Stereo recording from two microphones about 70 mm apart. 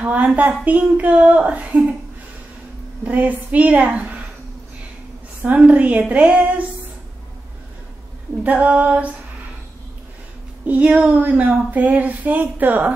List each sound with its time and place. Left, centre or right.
0.0 s speech: right
3.0 s speech: right
5.4 s speech: right
8.5 s speech: right
10.7 s speech: right